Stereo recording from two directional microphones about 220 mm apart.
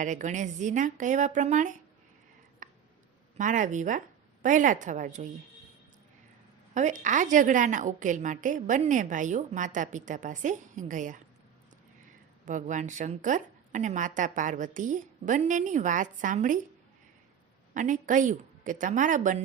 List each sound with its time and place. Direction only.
0.0 s a woman's voice: 35° right (ahead or behind)
2.6 s a sound: 35° right (ahead or behind)
3.3 s a woman's voice: 35° right (ahead or behind)
6.7 s a woman's voice: 35° right (ahead or behind)
12.5 s a woman's voice: 35° right (ahead or behind)
17.7 s a woman's voice: 35° right (ahead or behind)